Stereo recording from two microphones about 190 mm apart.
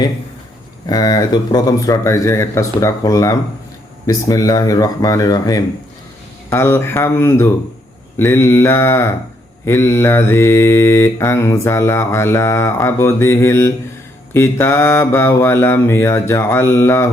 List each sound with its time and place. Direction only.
0.9 s mantra: 20° left (ahead or behind)
4.0 s speech: 20° left (ahead or behind)
6.5 s mantra: 15° left (ahead or behind)